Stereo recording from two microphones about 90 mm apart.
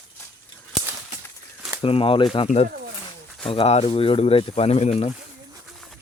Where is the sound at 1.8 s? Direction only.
90° left.